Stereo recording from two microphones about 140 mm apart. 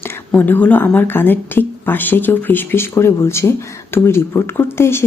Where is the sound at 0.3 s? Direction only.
15° left (ahead or behind).